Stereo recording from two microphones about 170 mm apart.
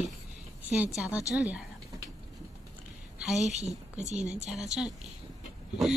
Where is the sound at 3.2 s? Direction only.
5° right (ahead or behind).